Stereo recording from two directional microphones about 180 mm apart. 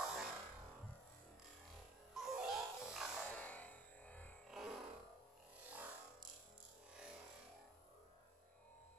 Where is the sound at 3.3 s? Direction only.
10° left (ahead or behind).